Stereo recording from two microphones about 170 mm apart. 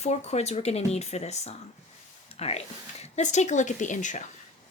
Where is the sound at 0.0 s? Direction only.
40° left (ahead or behind).